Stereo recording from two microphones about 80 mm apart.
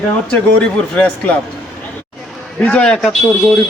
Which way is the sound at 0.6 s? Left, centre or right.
Centre.